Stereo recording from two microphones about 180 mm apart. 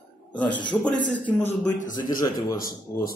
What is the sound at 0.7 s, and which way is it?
Speech, centre (ahead or behind).